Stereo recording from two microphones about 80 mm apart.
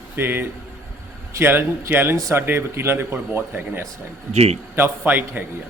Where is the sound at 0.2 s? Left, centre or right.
Right.